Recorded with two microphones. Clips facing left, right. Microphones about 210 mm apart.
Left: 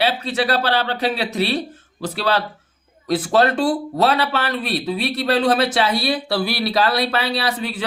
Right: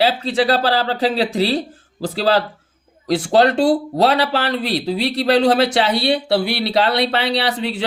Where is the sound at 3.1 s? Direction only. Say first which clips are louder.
Right 2 dB; 30° right (ahead or behind).